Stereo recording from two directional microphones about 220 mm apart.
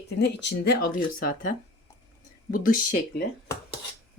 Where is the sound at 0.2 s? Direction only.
50° left (ahead or behind).